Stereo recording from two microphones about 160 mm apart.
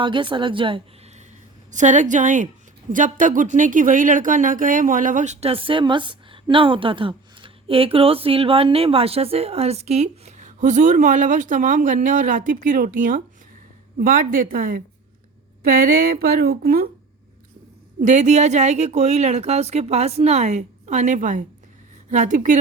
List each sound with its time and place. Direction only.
0.0 s a woman's voice: 30° right (ahead or behind)
1.7 s speech: 50° right (ahead or behind); by 16.9 s 75° right (ahead or behind)
18.0 s speech: 50° right (ahead or behind)